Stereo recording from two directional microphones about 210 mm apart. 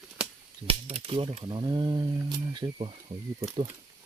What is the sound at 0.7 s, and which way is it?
Cap gun, 25° right (ahead or behind).